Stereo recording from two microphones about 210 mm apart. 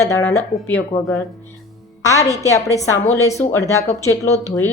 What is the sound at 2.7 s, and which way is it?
Speech, 15° left (ahead or behind).